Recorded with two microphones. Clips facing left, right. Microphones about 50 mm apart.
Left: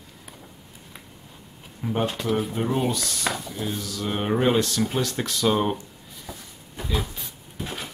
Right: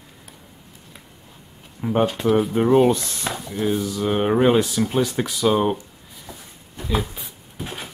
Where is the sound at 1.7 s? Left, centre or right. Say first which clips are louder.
Right 6 dB; centre.